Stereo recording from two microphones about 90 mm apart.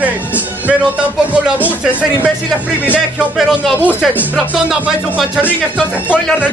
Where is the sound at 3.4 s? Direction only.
Centre (ahead or behind).